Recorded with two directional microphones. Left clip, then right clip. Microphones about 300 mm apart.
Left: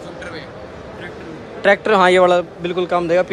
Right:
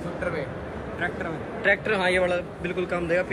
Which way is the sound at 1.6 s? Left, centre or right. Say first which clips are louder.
Left 10 dB; left.